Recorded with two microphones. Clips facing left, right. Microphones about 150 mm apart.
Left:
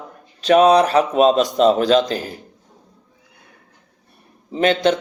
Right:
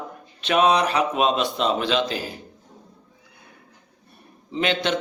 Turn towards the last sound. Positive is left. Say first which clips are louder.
# left 7 dB
turn(degrees=45)  # may be behind; listen again after turning